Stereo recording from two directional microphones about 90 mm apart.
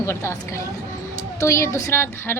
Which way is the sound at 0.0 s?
30° left (ahead or behind).